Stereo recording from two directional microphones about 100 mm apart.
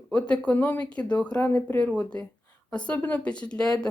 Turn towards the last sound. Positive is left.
turn(degrees=10)  # may be behind; listen again after turning